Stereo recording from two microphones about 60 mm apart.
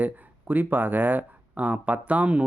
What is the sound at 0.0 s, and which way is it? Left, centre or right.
Speech, right.